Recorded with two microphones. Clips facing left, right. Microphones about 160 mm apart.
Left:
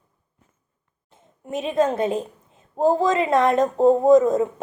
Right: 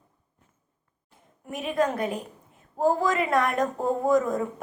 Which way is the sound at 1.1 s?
25° left (ahead or behind).